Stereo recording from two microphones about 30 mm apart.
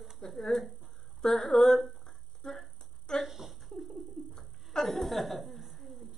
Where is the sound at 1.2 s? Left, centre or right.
Centre.